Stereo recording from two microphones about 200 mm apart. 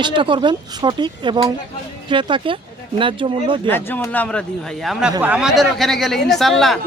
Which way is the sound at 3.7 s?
10° left (ahead or behind).